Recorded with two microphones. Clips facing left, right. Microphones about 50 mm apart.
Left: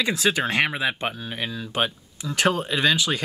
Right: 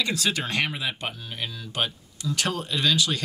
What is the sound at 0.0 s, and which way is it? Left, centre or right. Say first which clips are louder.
Speech: left 4 dB; centre.